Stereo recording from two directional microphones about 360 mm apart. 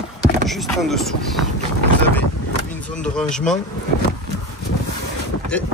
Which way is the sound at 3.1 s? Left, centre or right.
Centre.